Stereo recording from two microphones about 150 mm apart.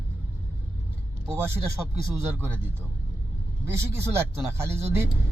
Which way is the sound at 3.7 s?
15° right (ahead or behind).